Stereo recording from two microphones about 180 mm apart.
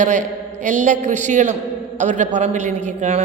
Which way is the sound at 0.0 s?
45° right (ahead or behind).